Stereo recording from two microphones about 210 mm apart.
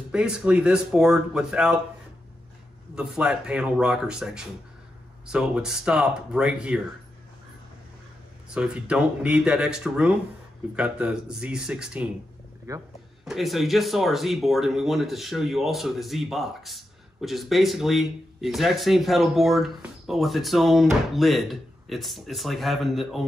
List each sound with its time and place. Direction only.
0.1 s speech: 5° right (ahead or behind)
3.0 s speech: 5° right (ahead or behind)
8.5 s speech: 5° right (ahead or behind)
12.7 s speech: 15° right (ahead or behind)
13.2 s speech: centre (ahead or behind)